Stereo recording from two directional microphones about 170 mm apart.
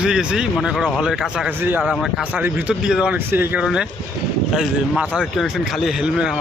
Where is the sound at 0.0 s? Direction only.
5° right (ahead or behind).